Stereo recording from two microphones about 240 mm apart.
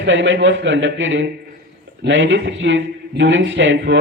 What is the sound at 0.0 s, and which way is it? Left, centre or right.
A man's voice, right.